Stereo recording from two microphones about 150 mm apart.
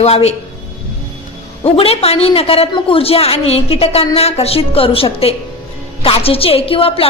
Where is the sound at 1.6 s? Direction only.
40° left (ahead or behind).